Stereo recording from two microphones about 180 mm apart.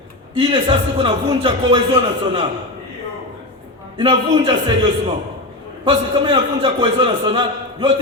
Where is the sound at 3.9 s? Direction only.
30° right (ahead or behind).